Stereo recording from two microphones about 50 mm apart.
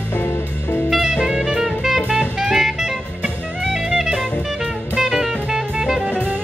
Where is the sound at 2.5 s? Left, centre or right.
Centre.